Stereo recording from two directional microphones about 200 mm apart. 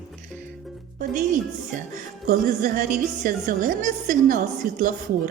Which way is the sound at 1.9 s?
40° right (ahead or behind).